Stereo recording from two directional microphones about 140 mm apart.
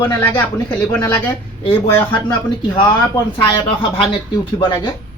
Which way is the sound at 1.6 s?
35° left (ahead or behind).